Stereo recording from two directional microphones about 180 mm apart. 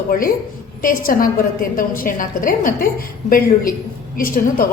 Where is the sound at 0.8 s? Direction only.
50° left (ahead or behind).